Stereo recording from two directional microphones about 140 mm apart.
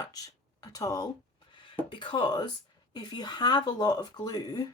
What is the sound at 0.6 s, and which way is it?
Speech, 25° left (ahead or behind).